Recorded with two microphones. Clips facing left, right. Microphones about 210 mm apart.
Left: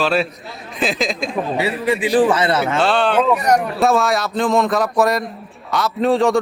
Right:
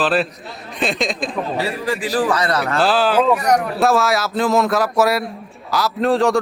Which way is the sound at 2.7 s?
Centre (ahead or behind).